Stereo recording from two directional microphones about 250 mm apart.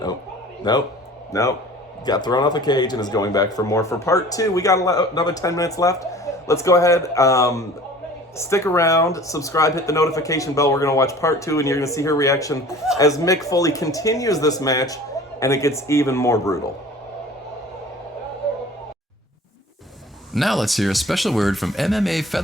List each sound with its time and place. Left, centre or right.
0.7 s speech: centre
20.3 s speech: centre